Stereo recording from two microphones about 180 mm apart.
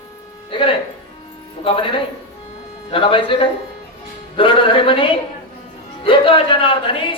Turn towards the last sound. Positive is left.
turn(degrees=30)  # may be behind; listen again after turning